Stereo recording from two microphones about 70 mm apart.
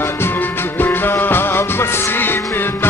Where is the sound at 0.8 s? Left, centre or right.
Left.